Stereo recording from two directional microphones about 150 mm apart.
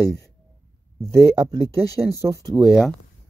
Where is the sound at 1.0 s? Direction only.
15° right (ahead or behind).